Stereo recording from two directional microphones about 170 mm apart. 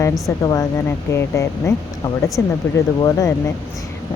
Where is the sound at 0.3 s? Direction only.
20° left (ahead or behind).